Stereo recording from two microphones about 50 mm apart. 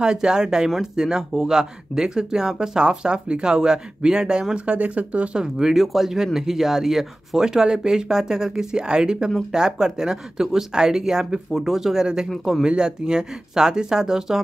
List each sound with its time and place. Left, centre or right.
0.0 s speech: centre
4.7 s speech: right
5.4 s speech: centre
12.3 s a man's voice: centre
12.6 s speech: centre